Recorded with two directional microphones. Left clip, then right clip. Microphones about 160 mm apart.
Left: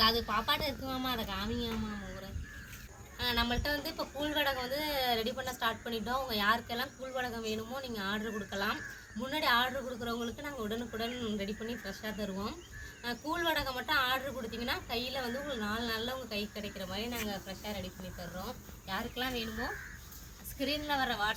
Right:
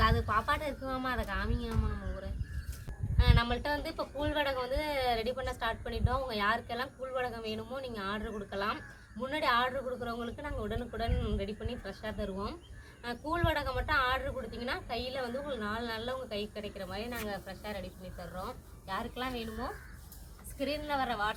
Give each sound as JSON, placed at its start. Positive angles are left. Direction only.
{"t": 0.0, "sound": "a woman's voice", "side_deg": 0}
{"t": 3.2, "sound": "speech", "side_deg": 10}
{"t": 16.6, "sound": "speech", "side_deg": -15}
{"t": 17.0, "sound": "speech", "side_deg": 15}
{"t": 20.6, "sound": "speech", "side_deg": 5}